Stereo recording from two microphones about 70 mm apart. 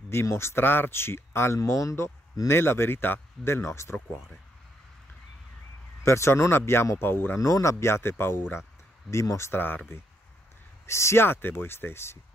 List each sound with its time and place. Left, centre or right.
0.1 s speech: left
1.6 s speech: left
2.4 s speech: left
6.0 s speech: left
7.3 s speech: left
9.1 s speech: left
9.5 s speech: left
10.9 s speech: left